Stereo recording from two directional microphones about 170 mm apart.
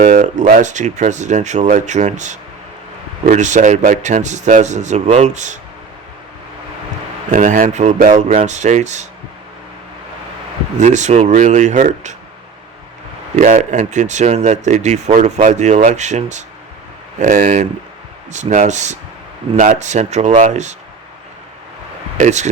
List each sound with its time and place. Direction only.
0.0 s speech: 50° right (ahead or behind)
7.3 s speech: 50° right (ahead or behind)
10.8 s speech: 45° right (ahead or behind)
13.3 s speech: 45° right (ahead or behind)
22.2 s speech: 45° right (ahead or behind)